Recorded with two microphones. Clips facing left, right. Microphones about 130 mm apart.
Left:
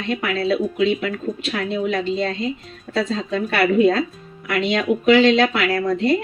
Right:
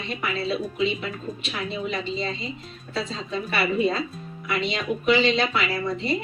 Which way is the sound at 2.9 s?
75° left (ahead or behind).